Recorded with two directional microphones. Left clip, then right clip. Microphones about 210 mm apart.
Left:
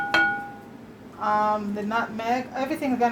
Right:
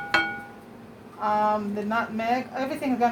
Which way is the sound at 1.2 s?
25° left (ahead or behind).